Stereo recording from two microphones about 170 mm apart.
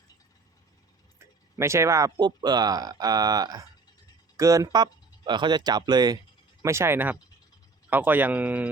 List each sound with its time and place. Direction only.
1.2 s speech: 15° right (ahead or behind)